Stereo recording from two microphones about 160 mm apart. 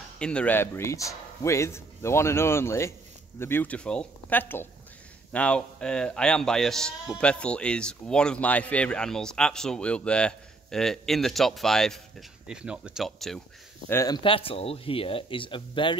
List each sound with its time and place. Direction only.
0.2 s a man's voice: 5° left (ahead or behind)
13.8 s speech: 20° left (ahead or behind)